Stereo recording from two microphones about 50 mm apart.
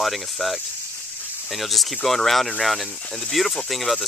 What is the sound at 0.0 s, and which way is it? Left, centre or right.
Speech, centre.